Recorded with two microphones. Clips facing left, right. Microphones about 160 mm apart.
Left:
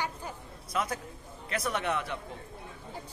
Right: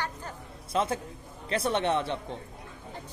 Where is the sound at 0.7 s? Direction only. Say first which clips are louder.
Right 4 dB; 25° right (ahead or behind).